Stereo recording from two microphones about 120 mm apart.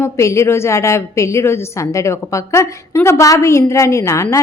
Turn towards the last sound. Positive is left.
turn(degrees=25)  # may be behind; listen again after turning